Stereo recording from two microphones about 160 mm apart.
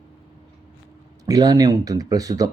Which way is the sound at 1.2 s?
25° right (ahead or behind).